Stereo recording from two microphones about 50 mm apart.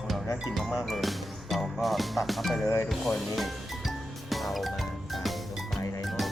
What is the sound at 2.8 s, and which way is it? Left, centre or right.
Music, centre.